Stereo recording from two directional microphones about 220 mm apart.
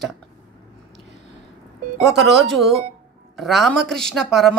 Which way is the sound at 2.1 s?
50° right (ahead or behind).